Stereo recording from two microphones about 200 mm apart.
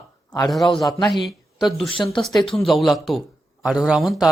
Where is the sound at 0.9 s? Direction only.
20° left (ahead or behind).